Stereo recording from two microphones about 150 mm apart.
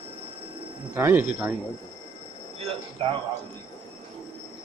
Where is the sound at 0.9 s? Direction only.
15° right (ahead or behind).